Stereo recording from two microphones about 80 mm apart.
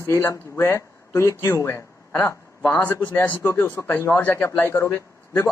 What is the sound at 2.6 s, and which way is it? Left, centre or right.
Speech, centre.